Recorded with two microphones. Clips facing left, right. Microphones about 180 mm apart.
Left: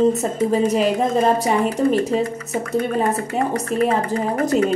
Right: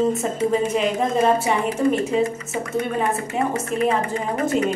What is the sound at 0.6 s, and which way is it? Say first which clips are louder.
Speech: left 3 dB; 40° left (ahead or behind).